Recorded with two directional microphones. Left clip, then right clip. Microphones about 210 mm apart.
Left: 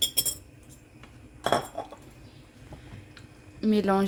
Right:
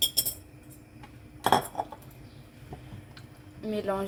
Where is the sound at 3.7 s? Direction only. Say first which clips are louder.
Left 6 dB; 55° left (ahead or behind).